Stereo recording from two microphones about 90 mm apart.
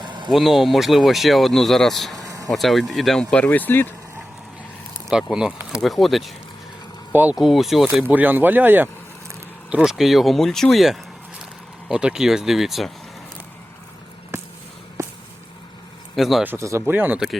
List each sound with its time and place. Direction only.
0.0 s a sound: 60° right (ahead or behind)
0.3 s speech: centre (ahead or behind)
2.1 s vehicle: 40° right (ahead or behind)
2.5 s speech: centre (ahead or behind); by 3.8 s 20° left (ahead or behind)
5.1 s speech: 10° right (ahead or behind)
7.1 s speech: 20° right (ahead or behind)
7.3 s speech: 5° right (ahead or behind)
8.1 s speech: 20° right (ahead or behind)
9.6 s speech: 10° right (ahead or behind)
14.3 s a sound: 30° right (ahead or behind)
16.1 s speech: centre (ahead or behind)
16.6 s speech: 30° right (ahead or behind)
16.9 s speech: 20° right (ahead or behind)